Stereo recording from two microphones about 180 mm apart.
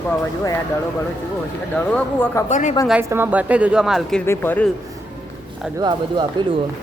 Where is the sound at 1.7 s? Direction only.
10° left (ahead or behind).